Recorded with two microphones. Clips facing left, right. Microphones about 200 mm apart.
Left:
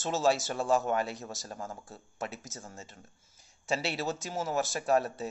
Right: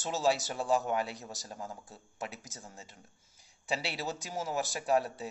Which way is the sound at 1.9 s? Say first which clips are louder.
Left 3 dB; 15° right (ahead or behind).